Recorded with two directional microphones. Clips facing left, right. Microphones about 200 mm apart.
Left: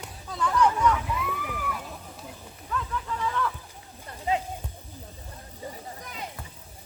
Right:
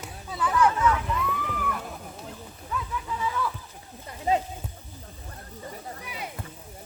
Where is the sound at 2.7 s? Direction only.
10° right (ahead or behind).